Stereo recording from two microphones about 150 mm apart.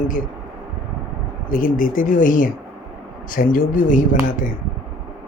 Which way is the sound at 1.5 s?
70° left (ahead or behind).